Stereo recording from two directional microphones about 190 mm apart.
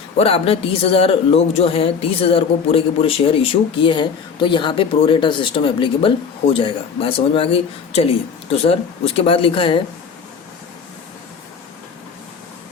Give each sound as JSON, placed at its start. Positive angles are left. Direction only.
{"t": 0.2, "sound": "speech", "side_deg": 30}